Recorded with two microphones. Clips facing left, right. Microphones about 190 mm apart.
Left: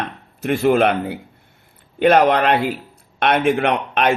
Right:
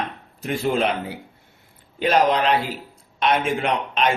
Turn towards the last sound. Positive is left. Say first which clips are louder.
# left 4 dB
turn(degrees=60)  # may be behind; listen again after turning